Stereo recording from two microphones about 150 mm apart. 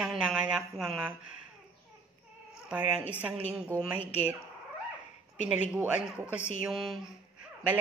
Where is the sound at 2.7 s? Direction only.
10° right (ahead or behind).